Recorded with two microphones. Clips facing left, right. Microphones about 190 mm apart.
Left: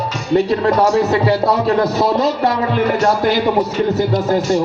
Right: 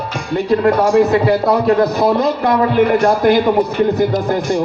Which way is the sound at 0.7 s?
55° right (ahead or behind).